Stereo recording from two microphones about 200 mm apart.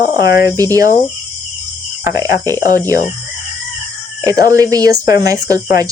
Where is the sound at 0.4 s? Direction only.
15° right (ahead or behind).